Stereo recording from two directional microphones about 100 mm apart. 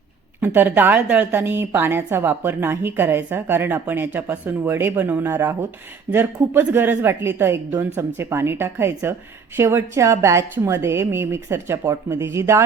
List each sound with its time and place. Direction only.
0.4 s a woman's voice: 20° right (ahead or behind)